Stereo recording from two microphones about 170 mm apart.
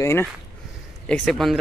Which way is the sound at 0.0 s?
15° left (ahead or behind).